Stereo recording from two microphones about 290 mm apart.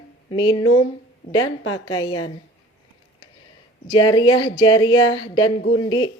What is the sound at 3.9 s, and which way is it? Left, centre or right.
Speech, centre.